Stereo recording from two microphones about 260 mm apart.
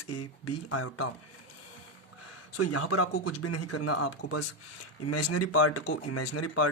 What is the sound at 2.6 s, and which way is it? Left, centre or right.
Speech, left.